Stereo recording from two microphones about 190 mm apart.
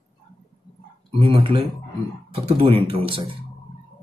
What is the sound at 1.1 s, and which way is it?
Speech, 30° right (ahead or behind).